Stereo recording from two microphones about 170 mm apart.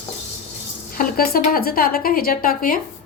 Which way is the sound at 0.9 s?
60° left (ahead or behind).